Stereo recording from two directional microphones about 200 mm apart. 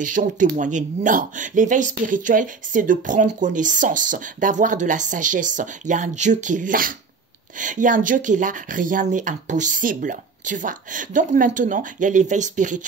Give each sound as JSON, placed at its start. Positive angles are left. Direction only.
{"t": 0.0, "sound": "speech", "side_deg": -40}